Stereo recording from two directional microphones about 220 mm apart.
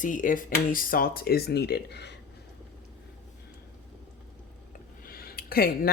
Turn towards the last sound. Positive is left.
turn(degrees=40)  # may be behind; listen again after turning